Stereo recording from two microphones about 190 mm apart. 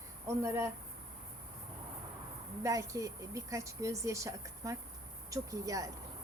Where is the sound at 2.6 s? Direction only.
15° right (ahead or behind).